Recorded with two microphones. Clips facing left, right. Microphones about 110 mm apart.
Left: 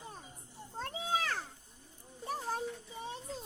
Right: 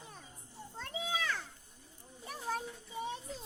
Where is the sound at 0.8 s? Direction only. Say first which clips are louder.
Left 3 dB; 50° left (ahead or behind).